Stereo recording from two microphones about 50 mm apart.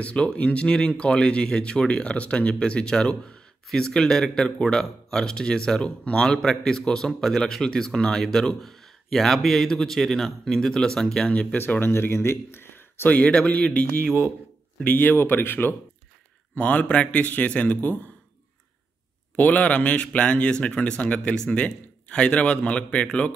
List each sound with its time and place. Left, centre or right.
0.0 s a man's voice: left
11.5 s speech: left
14.8 s speech: left
16.5 s a man's voice: left
19.3 s a man's voice: left